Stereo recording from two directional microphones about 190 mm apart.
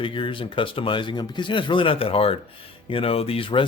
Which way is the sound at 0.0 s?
25° left (ahead or behind).